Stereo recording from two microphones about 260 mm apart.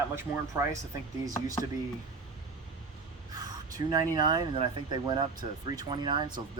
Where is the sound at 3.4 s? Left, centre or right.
Centre.